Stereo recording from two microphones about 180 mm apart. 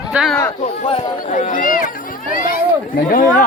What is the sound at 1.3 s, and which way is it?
Speech, 45° left (ahead or behind).